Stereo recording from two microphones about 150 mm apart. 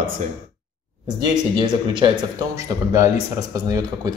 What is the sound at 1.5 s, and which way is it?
Speech, 30° right (ahead or behind).